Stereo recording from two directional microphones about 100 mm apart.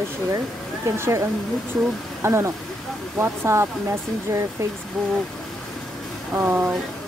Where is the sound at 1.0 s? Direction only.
30° right (ahead or behind).